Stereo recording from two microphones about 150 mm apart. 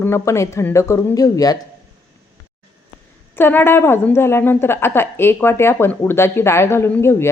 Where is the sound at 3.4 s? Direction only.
15° left (ahead or behind).